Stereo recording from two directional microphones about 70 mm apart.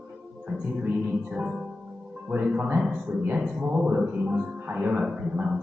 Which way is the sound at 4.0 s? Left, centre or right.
Right.